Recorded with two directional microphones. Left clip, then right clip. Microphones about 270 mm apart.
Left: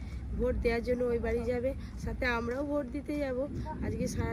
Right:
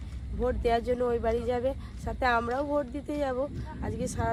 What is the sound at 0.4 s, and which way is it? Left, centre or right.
Speech, centre.